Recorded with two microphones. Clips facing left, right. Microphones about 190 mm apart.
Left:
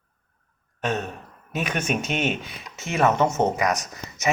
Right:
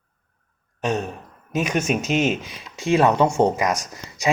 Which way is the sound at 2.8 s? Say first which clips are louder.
Right 4 dB; 15° right (ahead or behind).